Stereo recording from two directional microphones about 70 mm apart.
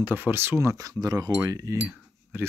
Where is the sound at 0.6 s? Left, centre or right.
Right.